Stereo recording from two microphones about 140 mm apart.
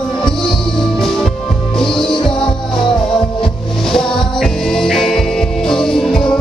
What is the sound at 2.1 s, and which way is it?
Music, 35° left (ahead or behind).